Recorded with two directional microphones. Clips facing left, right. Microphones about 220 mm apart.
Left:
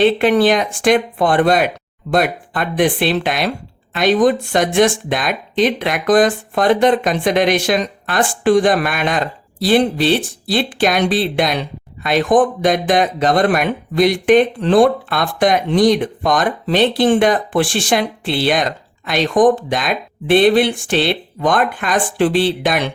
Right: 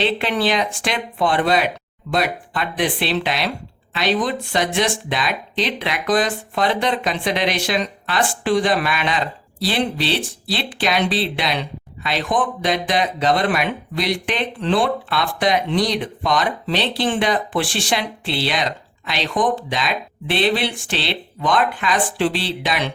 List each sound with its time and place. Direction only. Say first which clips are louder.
0.0 s speech: left 8 dB; 50° left (ahead or behind)